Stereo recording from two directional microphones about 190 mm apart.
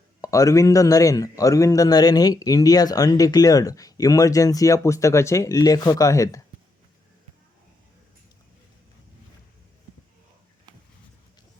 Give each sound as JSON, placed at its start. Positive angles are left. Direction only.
{"t": 0.2, "sound": "speech", "side_deg": 15}